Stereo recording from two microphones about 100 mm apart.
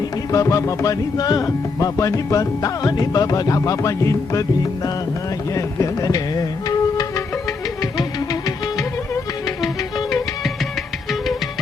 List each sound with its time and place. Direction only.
0.3 s speech: 30° left (ahead or behind)
5.5 s music: 35° left (ahead or behind)